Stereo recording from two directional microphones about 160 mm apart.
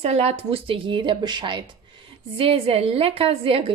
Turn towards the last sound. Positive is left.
turn(degrees=-35)  # may be behind; listen again after turning